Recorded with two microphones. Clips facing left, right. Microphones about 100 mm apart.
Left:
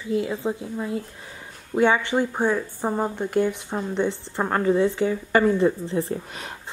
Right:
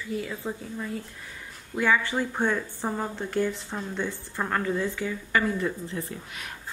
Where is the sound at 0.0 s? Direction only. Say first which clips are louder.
Left 7 dB; 25° left (ahead or behind).